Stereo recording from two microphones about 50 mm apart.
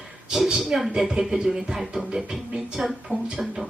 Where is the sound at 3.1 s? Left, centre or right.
Right.